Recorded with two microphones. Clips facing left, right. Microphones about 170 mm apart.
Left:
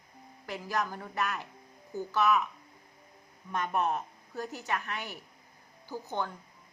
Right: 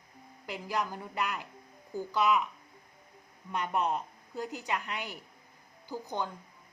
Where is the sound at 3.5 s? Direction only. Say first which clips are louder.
Left 1 dB; 15° right (ahead or behind).